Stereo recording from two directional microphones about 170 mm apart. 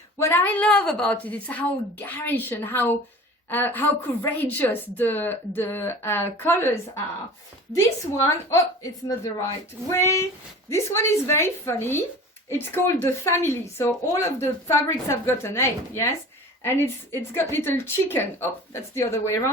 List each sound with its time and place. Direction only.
0.2 s speech: 15° left (ahead or behind)